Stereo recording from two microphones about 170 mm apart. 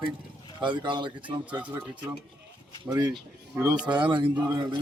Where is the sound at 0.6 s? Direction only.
25° right (ahead or behind).